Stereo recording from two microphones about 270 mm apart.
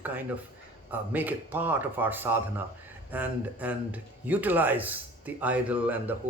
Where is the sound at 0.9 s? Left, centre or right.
Centre.